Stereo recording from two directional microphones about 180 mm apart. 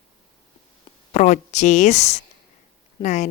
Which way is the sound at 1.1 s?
40° left (ahead or behind).